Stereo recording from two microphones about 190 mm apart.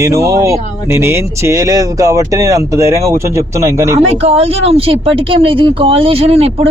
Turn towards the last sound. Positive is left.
turn(degrees=-30)  # may be behind; listen again after turning